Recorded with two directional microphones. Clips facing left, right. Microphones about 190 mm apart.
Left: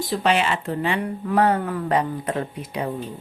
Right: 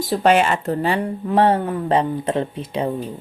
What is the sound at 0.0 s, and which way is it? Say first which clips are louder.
Speech: right 5 dB; 45° right (ahead or behind).